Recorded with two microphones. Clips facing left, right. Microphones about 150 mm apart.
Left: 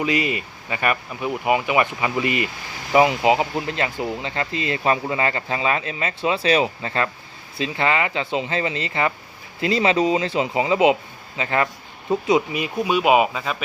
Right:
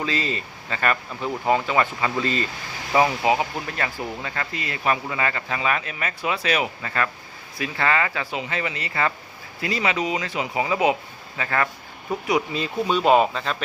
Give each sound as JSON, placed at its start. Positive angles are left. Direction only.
{"t": 0.0, "sound": "speech", "side_deg": 15}